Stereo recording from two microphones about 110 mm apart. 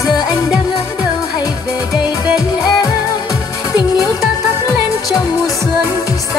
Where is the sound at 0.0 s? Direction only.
40° left (ahead or behind).